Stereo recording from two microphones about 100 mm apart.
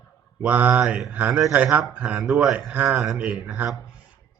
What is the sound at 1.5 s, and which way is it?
Speech, 15° right (ahead or behind).